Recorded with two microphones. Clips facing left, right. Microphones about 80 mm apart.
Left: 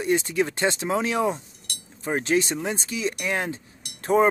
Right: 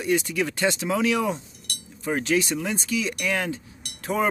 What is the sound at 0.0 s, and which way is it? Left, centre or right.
Speech, left.